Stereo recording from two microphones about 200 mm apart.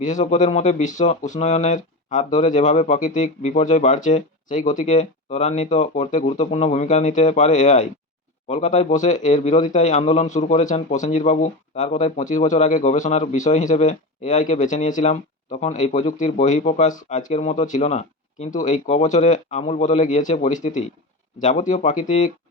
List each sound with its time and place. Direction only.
0.0 s speech: 35° left (ahead or behind)